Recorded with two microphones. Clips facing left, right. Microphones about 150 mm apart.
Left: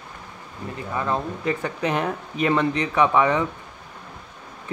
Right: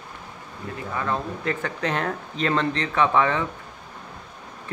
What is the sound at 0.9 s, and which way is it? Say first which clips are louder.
Speech: left 2 dB; 15° left (ahead or behind).